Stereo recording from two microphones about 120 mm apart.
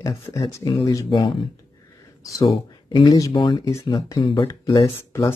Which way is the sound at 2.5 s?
45° left (ahead or behind).